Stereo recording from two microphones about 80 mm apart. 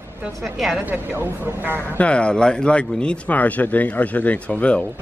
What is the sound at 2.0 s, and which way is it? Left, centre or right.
Speech, centre.